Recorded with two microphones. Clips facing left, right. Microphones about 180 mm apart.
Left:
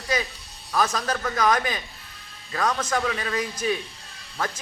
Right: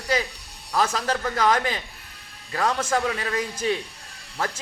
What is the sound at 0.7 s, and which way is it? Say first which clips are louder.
A man's voice: right 1 dB; 30° right (ahead or behind).